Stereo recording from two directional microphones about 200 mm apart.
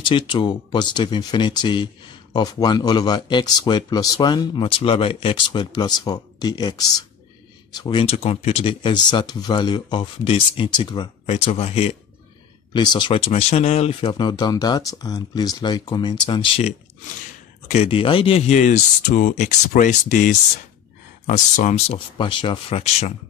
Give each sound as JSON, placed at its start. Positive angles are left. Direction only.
{"t": 0.0, "sound": "speech", "side_deg": 25}